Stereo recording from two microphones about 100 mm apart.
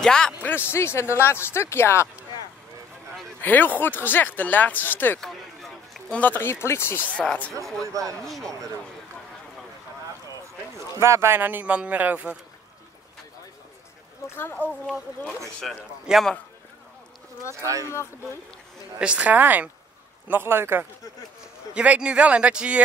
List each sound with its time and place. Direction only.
0.0 s speech: 5° left (ahead or behind)
0.4 s speech: 20° left (ahead or behind)
3.3 s speech: 20° left (ahead or behind)
5.2 s a sound: centre (ahead or behind)
6.1 s speech: 15° left (ahead or behind)
7.2 s speech: 15° left (ahead or behind)
7.8 s speech: 35° right (ahead or behind)
11.0 s speech: 25° right (ahead or behind)
14.2 s speech: 25° left (ahead or behind)
16.1 s a man's voice: centre (ahead or behind)
17.6 s speech: 35° right (ahead or behind)
18.9 s a man's voice: 10° right (ahead or behind)
21.7 s speech: 10° right (ahead or behind)